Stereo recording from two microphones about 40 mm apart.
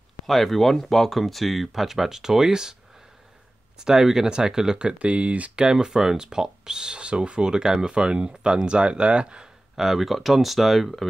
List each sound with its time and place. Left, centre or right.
0.3 s speech: centre
3.8 s speech: centre; by 5.5 s right
5.6 s speech: centre
9.8 s speech: centre